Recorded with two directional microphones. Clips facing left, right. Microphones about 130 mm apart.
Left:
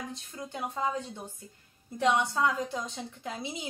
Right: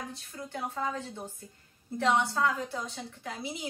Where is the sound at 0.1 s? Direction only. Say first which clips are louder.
Even; 20° left (ahead or behind).